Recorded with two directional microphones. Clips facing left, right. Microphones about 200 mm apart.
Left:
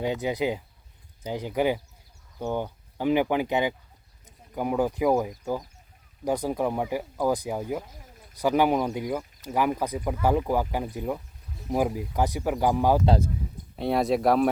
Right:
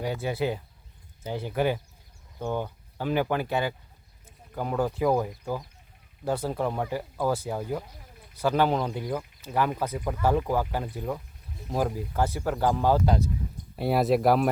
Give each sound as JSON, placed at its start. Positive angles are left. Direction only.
{"t": 0.0, "sound": "speech", "side_deg": 20}
{"t": 13.7, "sound": "speech", "side_deg": -5}